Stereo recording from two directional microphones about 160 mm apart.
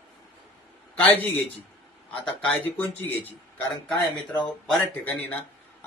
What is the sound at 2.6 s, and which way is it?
Speech, 10° left (ahead or behind).